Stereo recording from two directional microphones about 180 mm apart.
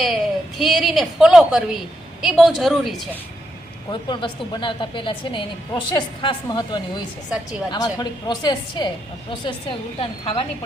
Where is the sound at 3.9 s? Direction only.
25° left (ahead or behind).